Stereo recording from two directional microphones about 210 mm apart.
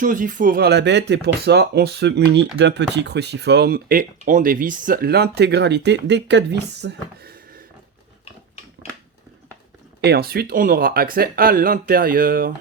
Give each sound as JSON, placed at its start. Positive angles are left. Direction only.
{"t": 0.0, "sound": "speech", "side_deg": -40}
{"t": 10.0, "sound": "speech", "side_deg": -50}